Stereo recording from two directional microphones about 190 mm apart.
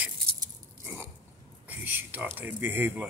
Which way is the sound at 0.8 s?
10° right (ahead or behind).